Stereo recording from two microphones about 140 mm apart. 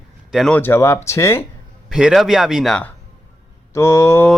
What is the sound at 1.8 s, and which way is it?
Speech, 5° right (ahead or behind).